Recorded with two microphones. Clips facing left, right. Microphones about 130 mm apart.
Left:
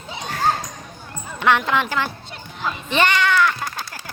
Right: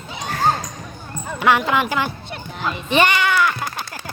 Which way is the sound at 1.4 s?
5° right (ahead or behind).